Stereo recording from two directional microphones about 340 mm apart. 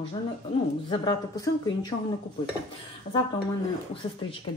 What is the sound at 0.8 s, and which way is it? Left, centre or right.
Speech, centre.